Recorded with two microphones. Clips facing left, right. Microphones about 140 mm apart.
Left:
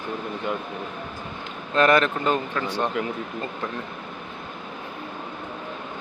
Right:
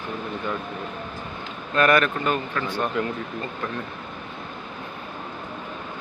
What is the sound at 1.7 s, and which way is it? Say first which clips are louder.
Speech: left 1 dB; 25° left (ahead or behind).